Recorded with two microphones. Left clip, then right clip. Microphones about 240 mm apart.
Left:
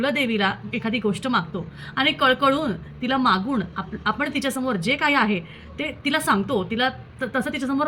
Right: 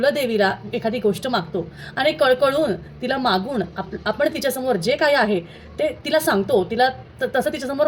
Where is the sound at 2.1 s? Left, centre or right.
Centre.